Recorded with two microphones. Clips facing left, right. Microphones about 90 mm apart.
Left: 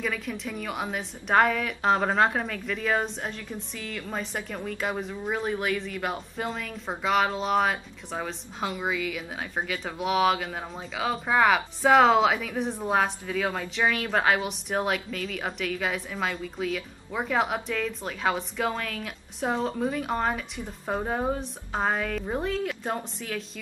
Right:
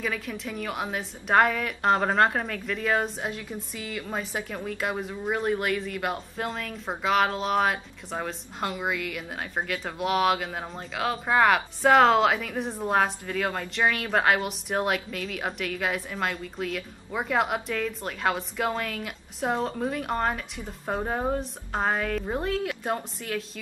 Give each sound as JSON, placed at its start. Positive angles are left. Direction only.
{"t": 0.0, "sound": "a woman's voice", "side_deg": 0}